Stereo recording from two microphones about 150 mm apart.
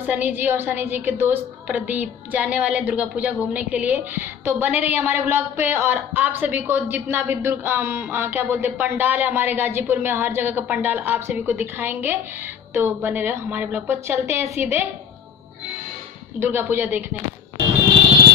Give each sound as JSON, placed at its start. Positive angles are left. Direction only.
{"t": 0.0, "sound": "a woman's voice", "side_deg": -10}
{"t": 16.3, "sound": "a woman's voice", "side_deg": -15}